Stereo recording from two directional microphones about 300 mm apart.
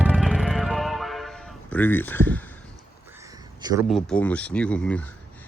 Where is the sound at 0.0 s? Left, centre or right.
Centre.